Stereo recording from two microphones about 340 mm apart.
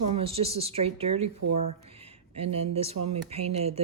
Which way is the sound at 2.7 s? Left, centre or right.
Centre.